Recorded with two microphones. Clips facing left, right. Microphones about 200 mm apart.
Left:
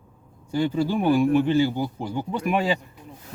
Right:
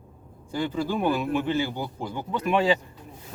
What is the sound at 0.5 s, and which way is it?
A man's voice, 15° left (ahead or behind).